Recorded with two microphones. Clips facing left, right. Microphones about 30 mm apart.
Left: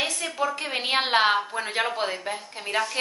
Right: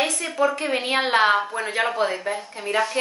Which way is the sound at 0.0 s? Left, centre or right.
Centre.